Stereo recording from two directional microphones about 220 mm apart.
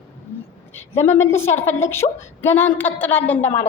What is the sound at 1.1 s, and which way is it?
A woman's voice, 10° left (ahead or behind).